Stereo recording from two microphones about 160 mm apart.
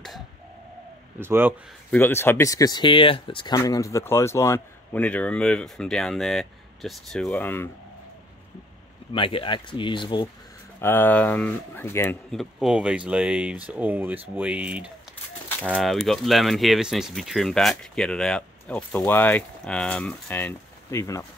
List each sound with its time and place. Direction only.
1.2 s speech: 15° right (ahead or behind)
1.9 s speech: 15° left (ahead or behind)
9.1 s speech: 35° left (ahead or behind)
10.8 s speech: 15° left (ahead or behind)
12.3 s speech: centre (ahead or behind); by 21.3 s 20° left (ahead or behind)